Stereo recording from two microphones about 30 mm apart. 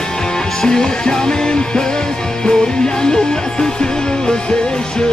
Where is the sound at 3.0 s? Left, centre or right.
Left.